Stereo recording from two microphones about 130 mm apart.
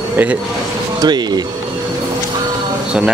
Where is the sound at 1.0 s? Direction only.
35° right (ahead or behind).